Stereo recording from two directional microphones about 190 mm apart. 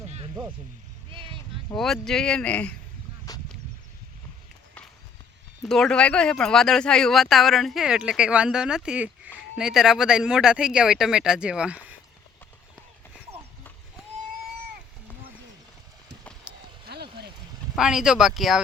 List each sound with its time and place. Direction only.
1.1 s a sound: 25° right (ahead or behind)
1.7 s speech: centre (ahead or behind)
3.3 s whip: 20° left (ahead or behind)
5.6 s speech: centre (ahead or behind)
16.5 s clip-clop: 5° right (ahead or behind)
16.8 s a sound: 60° right (ahead or behind)
17.7 s speech: 5° right (ahead or behind)